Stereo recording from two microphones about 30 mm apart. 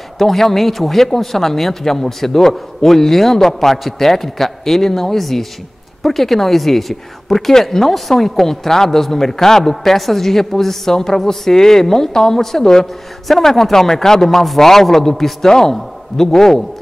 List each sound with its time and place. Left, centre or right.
0.2 s speech: centre